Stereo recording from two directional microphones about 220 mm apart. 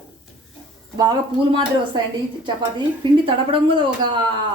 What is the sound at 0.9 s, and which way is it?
A woman's voice, 20° right (ahead or behind).